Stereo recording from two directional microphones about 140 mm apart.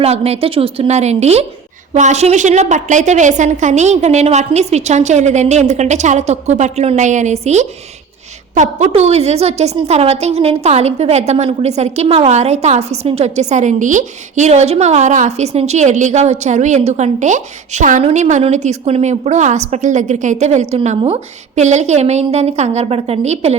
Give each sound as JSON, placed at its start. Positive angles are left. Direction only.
{"t": 0.0, "sound": "a woman's voice", "side_deg": -45}